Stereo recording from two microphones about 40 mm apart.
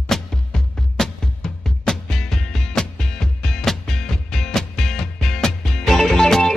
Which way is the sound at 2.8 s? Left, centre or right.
Centre.